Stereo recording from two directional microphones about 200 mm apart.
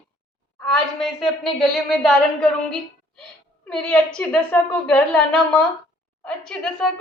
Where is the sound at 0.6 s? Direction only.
Centre (ahead or behind).